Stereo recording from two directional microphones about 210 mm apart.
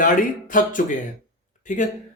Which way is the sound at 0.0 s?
40° left (ahead or behind).